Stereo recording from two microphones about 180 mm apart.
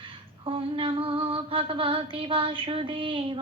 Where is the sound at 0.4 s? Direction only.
30° right (ahead or behind).